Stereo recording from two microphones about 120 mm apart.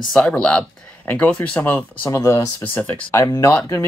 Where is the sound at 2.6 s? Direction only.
15° left (ahead or behind).